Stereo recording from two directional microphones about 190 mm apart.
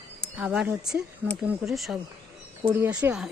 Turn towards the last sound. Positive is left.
turn(degrees=-5)  # may be behind; listen again after turning